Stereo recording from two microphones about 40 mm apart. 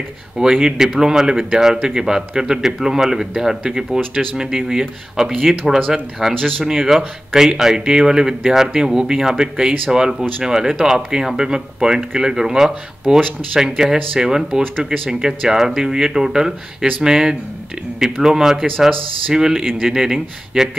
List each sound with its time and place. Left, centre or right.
0.4 s speech: centre